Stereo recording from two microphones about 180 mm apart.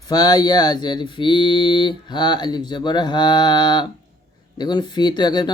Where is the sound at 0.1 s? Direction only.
20° left (ahead or behind).